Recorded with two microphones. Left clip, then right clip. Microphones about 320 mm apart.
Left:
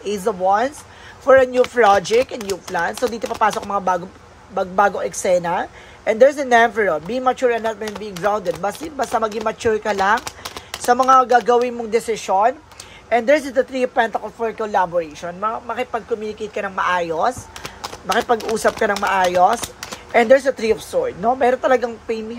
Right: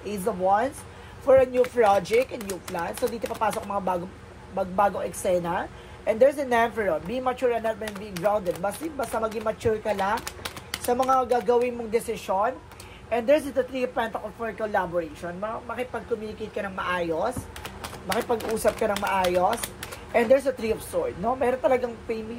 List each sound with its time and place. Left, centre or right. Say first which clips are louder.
0.0 s a woman's voice: left 7 dB; left